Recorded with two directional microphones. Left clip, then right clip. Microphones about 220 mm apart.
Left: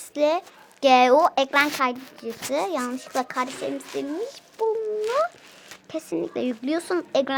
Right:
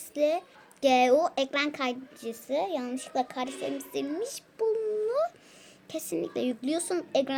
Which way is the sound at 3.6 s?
45° left (ahead or behind).